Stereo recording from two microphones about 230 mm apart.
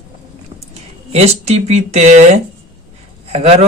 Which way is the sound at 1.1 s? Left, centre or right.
Right.